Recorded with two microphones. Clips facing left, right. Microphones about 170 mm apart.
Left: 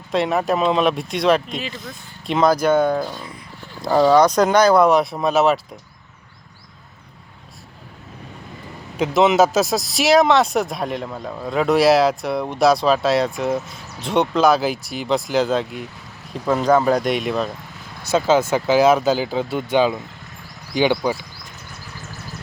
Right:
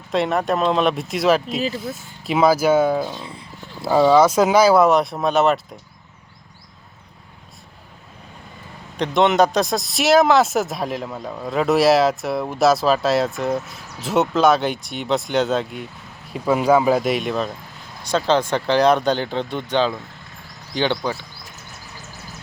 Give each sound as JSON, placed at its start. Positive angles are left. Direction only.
{"t": 0.1, "sound": "speech", "side_deg": 0}
{"t": 3.2, "sound": "speech", "side_deg": -30}
{"t": 3.8, "sound": "speech", "side_deg": -5}
{"t": 9.0, "sound": "speech", "side_deg": 0}